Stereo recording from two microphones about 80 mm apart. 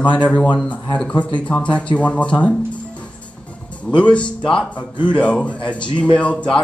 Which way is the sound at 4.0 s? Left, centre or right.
Centre.